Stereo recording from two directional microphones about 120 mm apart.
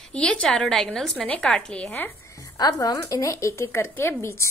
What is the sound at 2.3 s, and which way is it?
A child's voice, 30° left (ahead or behind).